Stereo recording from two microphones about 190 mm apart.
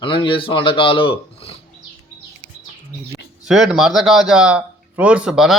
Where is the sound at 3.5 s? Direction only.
Centre (ahead or behind).